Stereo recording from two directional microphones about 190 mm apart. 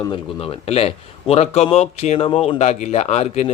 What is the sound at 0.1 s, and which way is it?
Speech, 30° left (ahead or behind).